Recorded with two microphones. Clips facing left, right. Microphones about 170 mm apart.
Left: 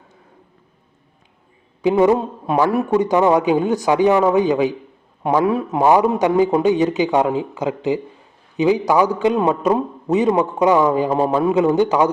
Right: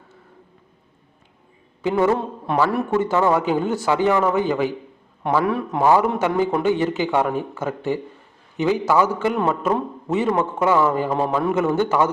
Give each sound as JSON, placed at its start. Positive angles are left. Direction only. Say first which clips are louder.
{"t": 1.8, "sound": "a man's voice", "louder": "left 4 dB", "side_deg": 15}